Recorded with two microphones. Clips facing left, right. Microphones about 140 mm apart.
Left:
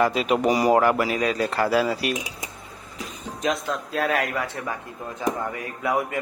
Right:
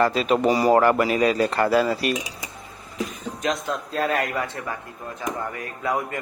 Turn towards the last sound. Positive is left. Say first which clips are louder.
# left 1 dB
turn(degrees=10)  # may be behind; listen again after turning